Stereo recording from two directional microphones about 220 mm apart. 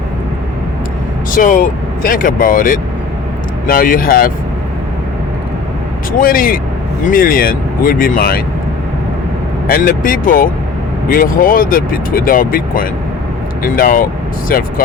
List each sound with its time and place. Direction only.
1.3 s speech: 40° left (ahead or behind)
6.1 s speech: 40° left (ahead or behind)
9.6 s speech: 40° left (ahead or behind)